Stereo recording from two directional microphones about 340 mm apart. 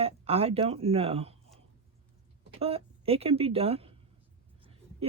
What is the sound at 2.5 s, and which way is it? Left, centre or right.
Speech, centre.